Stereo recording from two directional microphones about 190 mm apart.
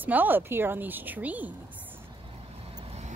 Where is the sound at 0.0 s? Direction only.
10° right (ahead or behind).